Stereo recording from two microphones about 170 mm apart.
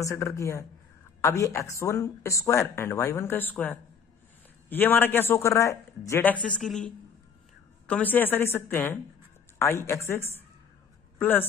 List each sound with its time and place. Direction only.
0.0 s speech: 15° left (ahead or behind)